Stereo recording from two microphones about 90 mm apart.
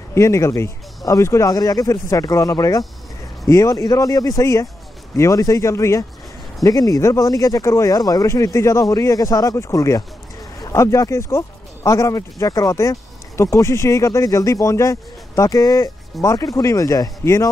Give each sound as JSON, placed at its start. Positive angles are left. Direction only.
{"t": 0.1, "sound": "speech", "side_deg": 30}